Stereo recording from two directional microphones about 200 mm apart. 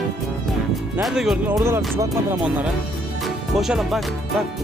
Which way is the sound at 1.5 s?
15° right (ahead or behind).